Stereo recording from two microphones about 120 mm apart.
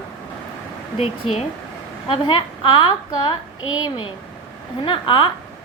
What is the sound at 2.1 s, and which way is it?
A woman's voice, 45° left (ahead or behind).